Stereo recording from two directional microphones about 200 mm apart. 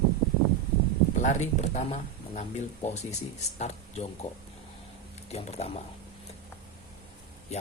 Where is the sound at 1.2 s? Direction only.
35° left (ahead or behind).